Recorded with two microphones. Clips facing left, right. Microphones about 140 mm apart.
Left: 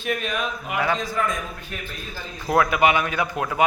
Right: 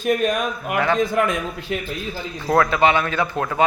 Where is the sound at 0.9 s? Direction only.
60° right (ahead or behind).